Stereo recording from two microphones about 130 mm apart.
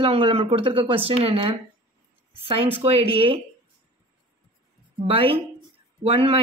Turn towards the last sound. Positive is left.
turn(degrees=-45)  # may be behind; listen again after turning